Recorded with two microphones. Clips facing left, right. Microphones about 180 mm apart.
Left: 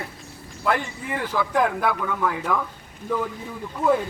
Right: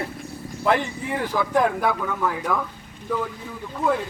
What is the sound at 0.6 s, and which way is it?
A man's voice, 20° right (ahead or behind).